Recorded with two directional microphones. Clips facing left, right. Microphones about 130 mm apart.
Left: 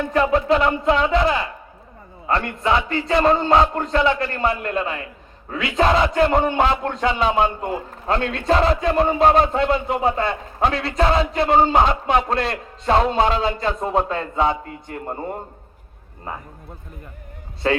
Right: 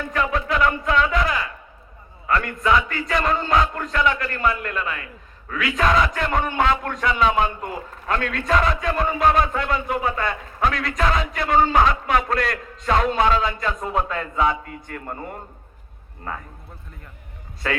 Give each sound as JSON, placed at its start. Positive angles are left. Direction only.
{"t": 0.0, "sound": "speech", "side_deg": 30}
{"t": 17.6, "sound": "speech", "side_deg": 30}